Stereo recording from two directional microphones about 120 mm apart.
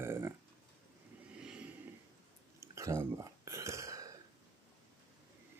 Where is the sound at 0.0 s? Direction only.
20° right (ahead or behind).